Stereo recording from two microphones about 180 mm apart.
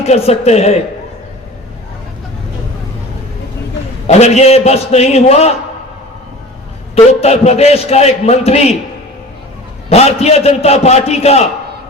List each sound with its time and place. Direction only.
0.0 s a man's voice: 35° left (ahead or behind)
4.0 s a man's voice: 35° left (ahead or behind)
6.9 s a man's voice: 35° left (ahead or behind)
9.9 s a man's voice: 35° left (ahead or behind)